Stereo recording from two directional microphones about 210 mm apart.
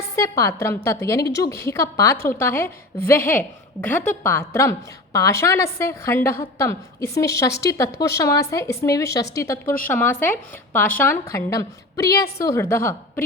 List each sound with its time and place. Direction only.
0.2 s a woman's voice: 15° left (ahead or behind)
2.1 s a woman's voice: 45° left (ahead or behind)
2.4 s a woman's voice: 10° left (ahead or behind)